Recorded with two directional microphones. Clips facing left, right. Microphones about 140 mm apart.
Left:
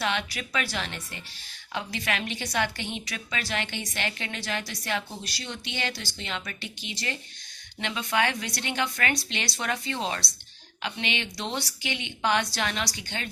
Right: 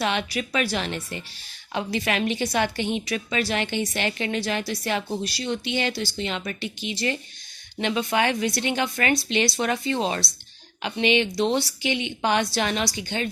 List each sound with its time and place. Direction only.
0.1 s a woman's voice: 20° right (ahead or behind)